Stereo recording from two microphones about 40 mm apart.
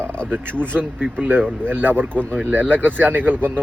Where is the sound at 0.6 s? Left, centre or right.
Right.